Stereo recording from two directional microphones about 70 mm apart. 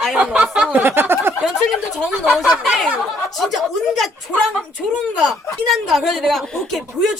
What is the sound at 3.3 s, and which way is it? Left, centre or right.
Speech, centre.